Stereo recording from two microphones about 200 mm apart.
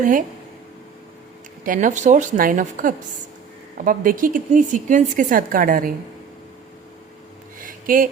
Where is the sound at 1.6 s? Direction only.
40° right (ahead or behind).